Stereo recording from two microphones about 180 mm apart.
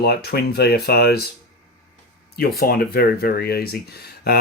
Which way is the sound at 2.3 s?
55° left (ahead or behind).